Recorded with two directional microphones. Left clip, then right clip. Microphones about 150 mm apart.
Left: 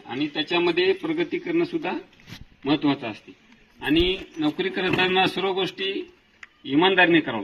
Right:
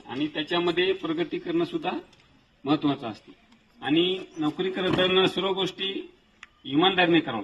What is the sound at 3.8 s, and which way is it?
Speech, 65° left (ahead or behind).